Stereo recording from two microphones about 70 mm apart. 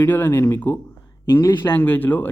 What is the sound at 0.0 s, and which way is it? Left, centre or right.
Speech, left.